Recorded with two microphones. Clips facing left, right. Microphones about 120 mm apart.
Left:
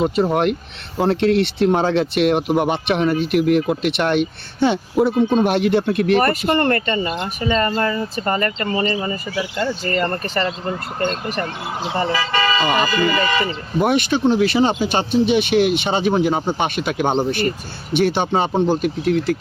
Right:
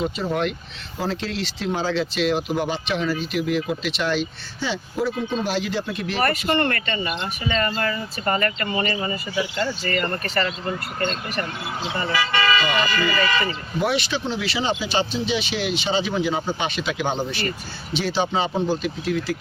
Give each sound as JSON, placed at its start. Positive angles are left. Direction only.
{"t": 0.2, "sound": "speech", "side_deg": 55}
{"t": 6.7, "sound": "speech", "side_deg": 40}
{"t": 11.9, "sound": "speech", "side_deg": 30}